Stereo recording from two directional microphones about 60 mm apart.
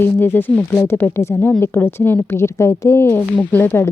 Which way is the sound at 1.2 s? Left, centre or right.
Left.